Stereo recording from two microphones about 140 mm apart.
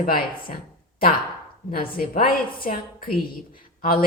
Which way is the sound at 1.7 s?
90° left.